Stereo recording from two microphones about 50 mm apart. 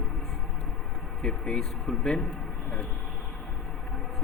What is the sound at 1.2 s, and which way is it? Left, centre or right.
Speech, centre.